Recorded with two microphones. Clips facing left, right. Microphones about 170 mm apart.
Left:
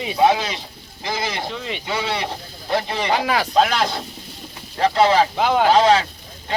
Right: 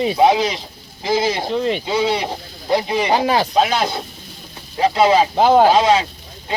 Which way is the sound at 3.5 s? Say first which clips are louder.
Right 1 dB; 10° right (ahead or behind).